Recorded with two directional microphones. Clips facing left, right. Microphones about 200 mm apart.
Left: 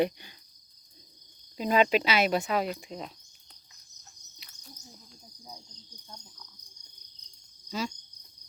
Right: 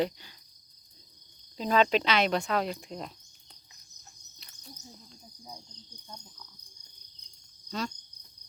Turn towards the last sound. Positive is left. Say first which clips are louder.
# left 1 dB
turn(degrees=5)  # may be behind; listen again after turning